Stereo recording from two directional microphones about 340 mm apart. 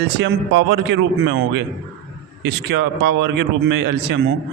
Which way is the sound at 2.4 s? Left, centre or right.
Right.